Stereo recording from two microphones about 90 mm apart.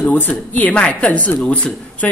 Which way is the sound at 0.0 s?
15° left (ahead or behind).